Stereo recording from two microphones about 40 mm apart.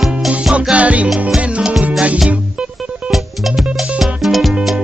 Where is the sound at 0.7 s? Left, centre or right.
Right.